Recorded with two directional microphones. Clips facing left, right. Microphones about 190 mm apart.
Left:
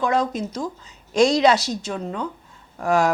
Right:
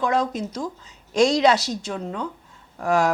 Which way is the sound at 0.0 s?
15° left (ahead or behind).